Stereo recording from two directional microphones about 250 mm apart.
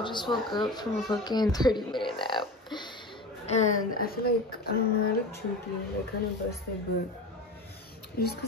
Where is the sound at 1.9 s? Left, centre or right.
Centre.